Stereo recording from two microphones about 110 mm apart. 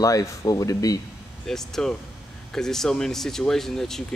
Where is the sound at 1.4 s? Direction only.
5° left (ahead or behind).